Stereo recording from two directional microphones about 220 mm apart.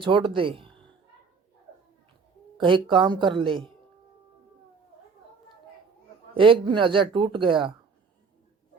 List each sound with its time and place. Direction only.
0.0 s speech: 20° right (ahead or behind)
2.6 s speech: 20° right (ahead or behind)
6.3 s speech: 25° right (ahead or behind)